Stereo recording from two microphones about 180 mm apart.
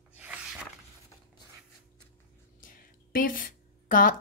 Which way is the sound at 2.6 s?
50° left (ahead or behind).